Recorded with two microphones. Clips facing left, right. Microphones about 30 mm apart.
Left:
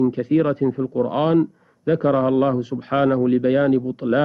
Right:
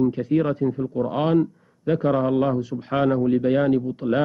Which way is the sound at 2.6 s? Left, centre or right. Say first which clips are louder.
Left 3 dB; left.